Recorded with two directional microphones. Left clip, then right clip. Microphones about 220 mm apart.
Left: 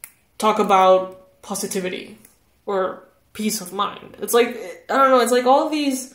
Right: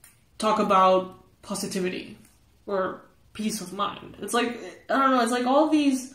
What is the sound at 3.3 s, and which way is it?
Speech, 35° left (ahead or behind).